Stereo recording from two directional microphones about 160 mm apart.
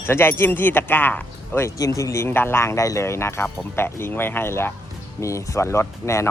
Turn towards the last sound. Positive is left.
turn(degrees=15)  # may be behind; listen again after turning